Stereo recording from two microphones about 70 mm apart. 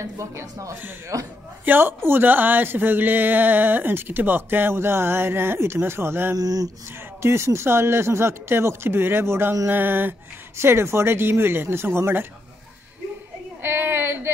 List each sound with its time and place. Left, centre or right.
0.0 s a man's voice: right
1.6 s speech: right
6.3 s speech: right
7.2 s speech: right
9.7 s a sound: right
10.6 s speech: right
13.6 s a woman's voice: right